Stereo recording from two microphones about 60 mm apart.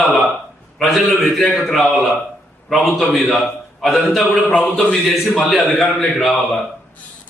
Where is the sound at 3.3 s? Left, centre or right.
Centre.